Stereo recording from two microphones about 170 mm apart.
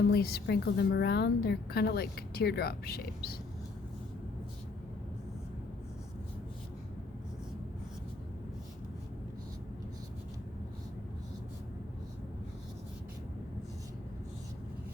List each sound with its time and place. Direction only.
0.1 s a woman's voice: 65° left (ahead or behind)